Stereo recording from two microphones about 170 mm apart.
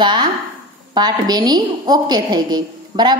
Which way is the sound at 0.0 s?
25° right (ahead or behind).